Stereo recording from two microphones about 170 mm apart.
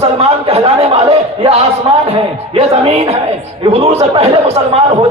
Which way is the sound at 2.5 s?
35° right (ahead or behind).